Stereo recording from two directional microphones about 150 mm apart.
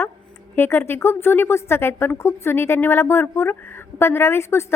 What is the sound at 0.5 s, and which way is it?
Speech, 15° left (ahead or behind).